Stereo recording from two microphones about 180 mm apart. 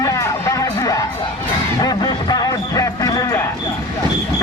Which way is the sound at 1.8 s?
20° left (ahead or behind).